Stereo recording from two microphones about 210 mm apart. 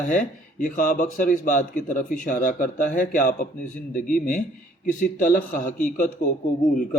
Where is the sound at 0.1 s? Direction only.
40° left (ahead or behind).